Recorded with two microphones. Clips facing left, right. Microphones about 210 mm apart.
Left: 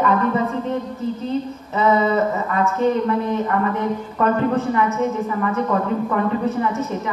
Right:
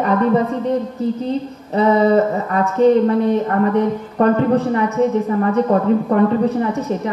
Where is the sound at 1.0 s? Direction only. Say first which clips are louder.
Right 3 dB; 35° right (ahead or behind).